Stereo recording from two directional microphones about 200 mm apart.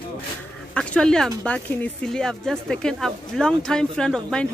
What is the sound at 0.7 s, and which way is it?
Speech, 5° left (ahead or behind).